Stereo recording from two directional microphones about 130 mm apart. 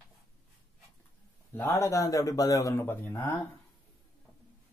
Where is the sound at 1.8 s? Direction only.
25° left (ahead or behind).